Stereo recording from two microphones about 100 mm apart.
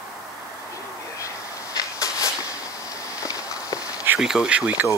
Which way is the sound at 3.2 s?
35° left (ahead or behind).